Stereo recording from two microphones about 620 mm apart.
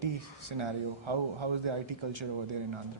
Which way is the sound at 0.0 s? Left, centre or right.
Right.